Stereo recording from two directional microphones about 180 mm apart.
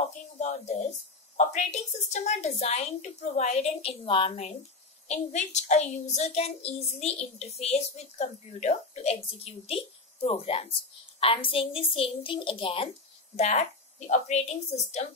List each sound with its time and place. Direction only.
0.4 s a child's voice: 40° left (ahead or behind)